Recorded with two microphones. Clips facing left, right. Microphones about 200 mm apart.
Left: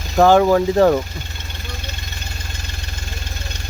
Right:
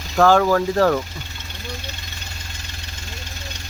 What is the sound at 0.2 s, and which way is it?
Speech, 20° left (ahead or behind).